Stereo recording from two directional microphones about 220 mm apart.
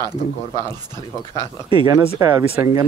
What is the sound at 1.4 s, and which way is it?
Speech, 20° right (ahead or behind).